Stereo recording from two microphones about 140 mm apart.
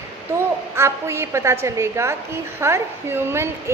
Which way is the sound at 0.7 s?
20° right (ahead or behind).